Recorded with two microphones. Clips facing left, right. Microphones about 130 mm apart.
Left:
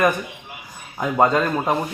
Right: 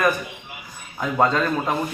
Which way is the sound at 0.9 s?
15° left (ahead or behind).